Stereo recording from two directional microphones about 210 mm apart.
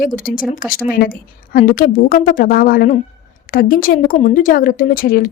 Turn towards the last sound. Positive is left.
turn(degrees=45)  # may be behind; listen again after turning